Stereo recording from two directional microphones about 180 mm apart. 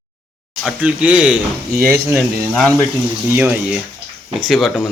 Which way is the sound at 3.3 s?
10° right (ahead or behind).